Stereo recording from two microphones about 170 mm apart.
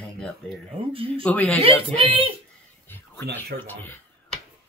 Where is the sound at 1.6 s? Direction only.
35° right (ahead or behind).